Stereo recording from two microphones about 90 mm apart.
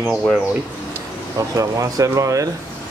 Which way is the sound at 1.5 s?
40° right (ahead or behind).